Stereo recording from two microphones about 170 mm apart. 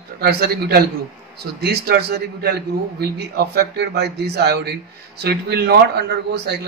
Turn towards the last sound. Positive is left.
turn(degrees=-75)  # may be behind; listen again after turning